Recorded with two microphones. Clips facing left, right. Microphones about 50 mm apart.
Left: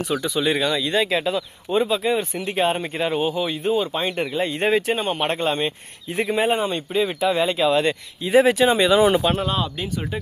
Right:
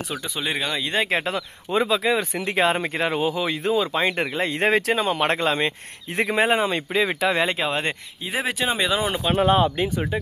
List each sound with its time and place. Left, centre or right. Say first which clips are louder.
0.3 s speech: left 4 dB; centre
0.8 s speech: left 2 dB; right
1.2 s speech: left 3 dB; right
6.1 s speech: even; right
7.6 s speech: left 6 dB; right
8.3 s speech: left 9 dB; centre
9.4 s speech: right 6 dB; right